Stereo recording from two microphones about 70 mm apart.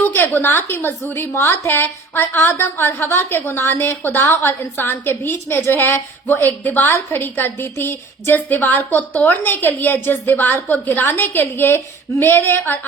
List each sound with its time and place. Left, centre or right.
0.3 s a woman's voice: left